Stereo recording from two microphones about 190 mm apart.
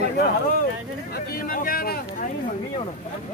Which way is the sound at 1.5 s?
50° left (ahead or behind).